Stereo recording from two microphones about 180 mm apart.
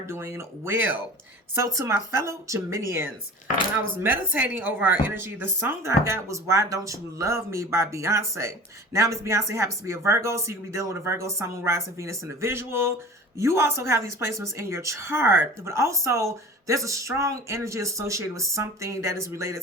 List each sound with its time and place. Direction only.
0.1 s a woman's voice: 15° right (ahead or behind)